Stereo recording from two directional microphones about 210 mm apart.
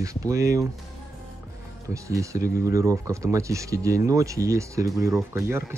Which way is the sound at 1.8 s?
15° right (ahead or behind).